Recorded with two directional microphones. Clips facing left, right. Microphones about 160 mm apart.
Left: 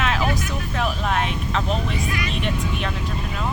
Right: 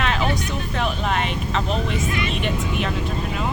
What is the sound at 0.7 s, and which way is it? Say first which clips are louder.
Speech: even; centre (ahead or behind).